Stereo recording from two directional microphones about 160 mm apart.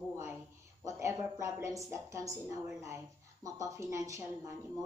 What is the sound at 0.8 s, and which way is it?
A woman's voice, 20° right (ahead or behind).